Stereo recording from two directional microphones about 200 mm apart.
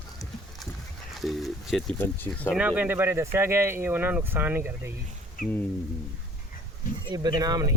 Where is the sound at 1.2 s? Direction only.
Centre (ahead or behind).